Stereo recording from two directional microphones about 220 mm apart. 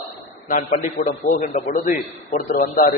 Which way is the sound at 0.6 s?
35° left (ahead or behind).